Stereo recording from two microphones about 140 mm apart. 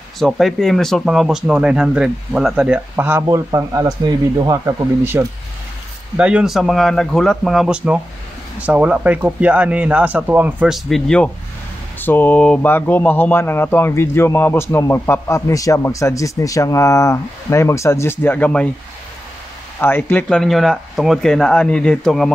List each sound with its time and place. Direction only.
0.2 s speech: centre (ahead or behind); by 5.2 s 20° right (ahead or behind)
6.1 s speech: 5° right (ahead or behind)
10.7 s speech: 5° left (ahead or behind)
12.0 s speech: 15° left (ahead or behind)
19.8 s speech: 15° left (ahead or behind)